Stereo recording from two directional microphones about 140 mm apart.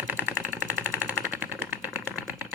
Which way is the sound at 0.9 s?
10° right (ahead or behind).